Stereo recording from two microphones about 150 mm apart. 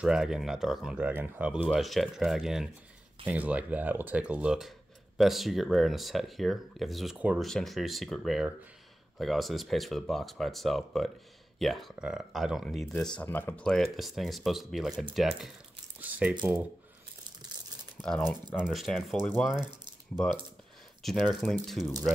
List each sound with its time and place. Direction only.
0.0 s speech: 5° right (ahead or behind)
18.6 s speech: centre (ahead or behind)
19.5 s speech: 30° right (ahead or behind)
21.0 s speech: centre (ahead or behind)